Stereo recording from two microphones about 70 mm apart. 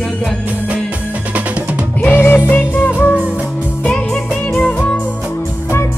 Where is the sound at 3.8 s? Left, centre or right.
Centre.